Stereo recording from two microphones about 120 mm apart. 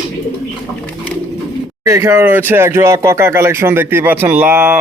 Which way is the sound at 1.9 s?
25° right (ahead or behind).